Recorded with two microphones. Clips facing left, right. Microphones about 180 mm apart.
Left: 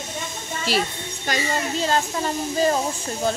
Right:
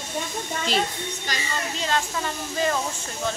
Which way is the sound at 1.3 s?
40° left (ahead or behind).